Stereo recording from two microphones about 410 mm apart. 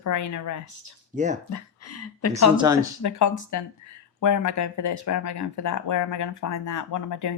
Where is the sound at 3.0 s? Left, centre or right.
Left.